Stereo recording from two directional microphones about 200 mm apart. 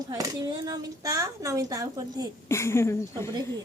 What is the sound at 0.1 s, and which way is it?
Speech, 15° right (ahead or behind).